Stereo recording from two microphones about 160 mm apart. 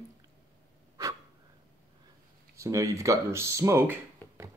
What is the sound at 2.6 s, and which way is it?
Speech, 20° right (ahead or behind).